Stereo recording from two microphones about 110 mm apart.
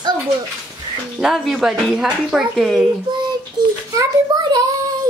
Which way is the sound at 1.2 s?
Centre (ahead or behind).